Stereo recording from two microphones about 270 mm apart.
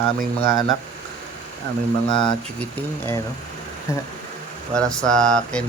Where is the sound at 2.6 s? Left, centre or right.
Centre.